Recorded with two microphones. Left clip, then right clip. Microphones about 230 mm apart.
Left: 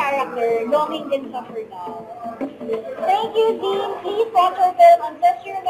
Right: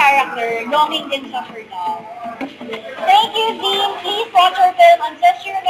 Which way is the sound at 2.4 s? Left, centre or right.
Centre.